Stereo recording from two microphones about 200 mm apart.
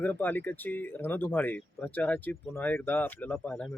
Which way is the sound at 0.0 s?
10° left (ahead or behind).